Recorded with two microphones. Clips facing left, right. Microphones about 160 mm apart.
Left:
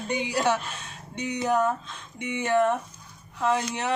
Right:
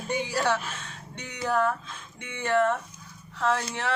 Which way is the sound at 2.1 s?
15° left (ahead or behind).